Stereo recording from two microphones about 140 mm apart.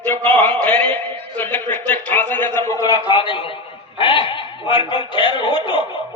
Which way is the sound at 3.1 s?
35° left (ahead or behind).